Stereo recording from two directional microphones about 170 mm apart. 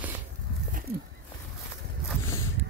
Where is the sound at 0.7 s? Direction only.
55° right (ahead or behind).